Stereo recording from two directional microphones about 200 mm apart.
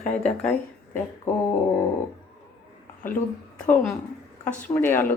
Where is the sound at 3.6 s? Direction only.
5° left (ahead or behind).